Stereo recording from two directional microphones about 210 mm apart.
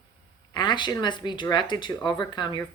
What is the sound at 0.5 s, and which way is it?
Speech, 20° left (ahead or behind).